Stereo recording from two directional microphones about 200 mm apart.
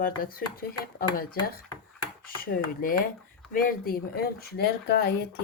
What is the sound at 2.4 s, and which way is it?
Speech, 45° left (ahead or behind).